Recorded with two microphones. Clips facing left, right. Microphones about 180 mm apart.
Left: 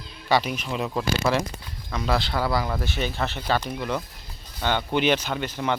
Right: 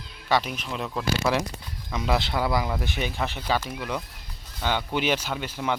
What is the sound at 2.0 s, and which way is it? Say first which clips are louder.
Speech: even; 20° right (ahead or behind).